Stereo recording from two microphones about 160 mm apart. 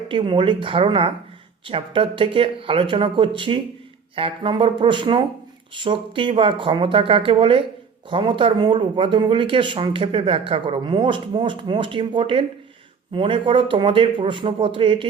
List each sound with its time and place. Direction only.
0.1 s speech: 30° right (ahead or behind)